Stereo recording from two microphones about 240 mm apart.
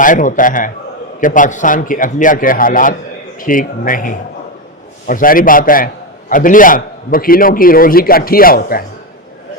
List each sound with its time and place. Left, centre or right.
0.0 s a man's voice: left